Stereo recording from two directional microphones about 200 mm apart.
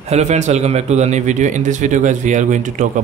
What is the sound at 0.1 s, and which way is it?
A man's voice, 35° right (ahead or behind).